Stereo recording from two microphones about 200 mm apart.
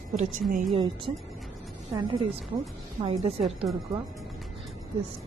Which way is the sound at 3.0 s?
30° right (ahead or behind).